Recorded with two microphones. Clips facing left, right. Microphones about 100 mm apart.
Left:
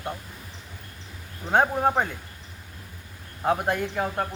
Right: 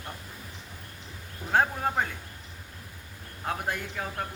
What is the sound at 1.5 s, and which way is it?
Speech, 20° left (ahead or behind).